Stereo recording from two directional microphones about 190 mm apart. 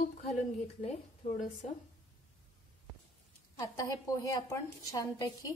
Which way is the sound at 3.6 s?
20° left (ahead or behind).